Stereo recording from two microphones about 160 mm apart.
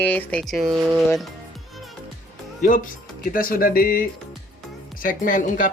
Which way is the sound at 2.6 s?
55° left (ahead or behind).